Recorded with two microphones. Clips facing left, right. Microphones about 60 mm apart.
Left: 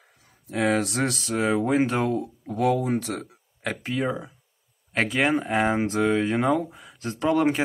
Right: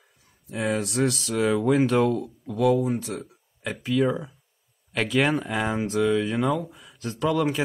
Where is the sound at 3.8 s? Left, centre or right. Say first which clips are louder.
Right 5 dB; left.